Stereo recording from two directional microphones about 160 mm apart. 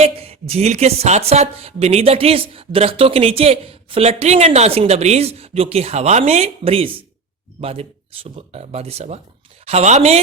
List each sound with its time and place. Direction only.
0.0 s speech: 40° right (ahead or behind)